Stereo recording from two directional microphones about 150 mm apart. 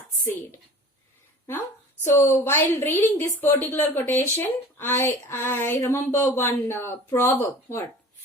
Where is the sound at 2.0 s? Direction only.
20° left (ahead or behind).